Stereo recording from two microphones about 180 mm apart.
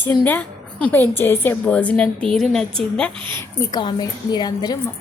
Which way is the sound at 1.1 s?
10° left (ahead or behind).